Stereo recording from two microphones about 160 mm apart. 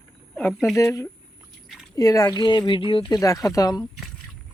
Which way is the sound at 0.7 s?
20° left (ahead or behind).